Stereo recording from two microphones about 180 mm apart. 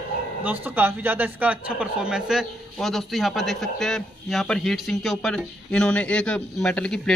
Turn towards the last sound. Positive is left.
turn(degrees=5)  # may be behind; listen again after turning